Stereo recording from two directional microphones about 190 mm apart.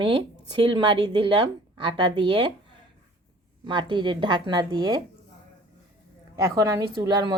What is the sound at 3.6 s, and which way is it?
A woman's voice, 25° right (ahead or behind).